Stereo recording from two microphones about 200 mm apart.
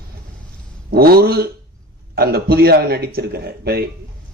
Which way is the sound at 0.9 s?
50° right (ahead or behind).